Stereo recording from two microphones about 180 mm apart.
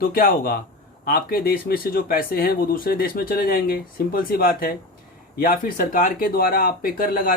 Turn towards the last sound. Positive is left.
turn(degrees=50)  # may be behind; listen again after turning